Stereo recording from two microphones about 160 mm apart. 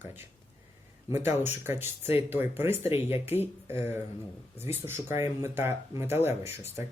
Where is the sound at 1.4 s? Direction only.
15° right (ahead or behind).